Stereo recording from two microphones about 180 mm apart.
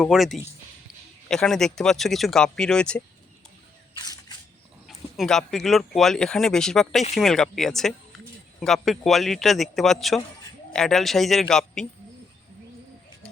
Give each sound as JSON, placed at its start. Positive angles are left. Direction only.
{"t": 0.0, "sound": "speech", "side_deg": 0}
{"t": 3.9, "sound": "camera", "side_deg": 20}
{"t": 4.9, "sound": "speech", "side_deg": 0}